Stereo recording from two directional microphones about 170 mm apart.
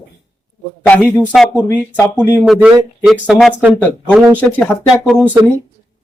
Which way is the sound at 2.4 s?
5° right (ahead or behind).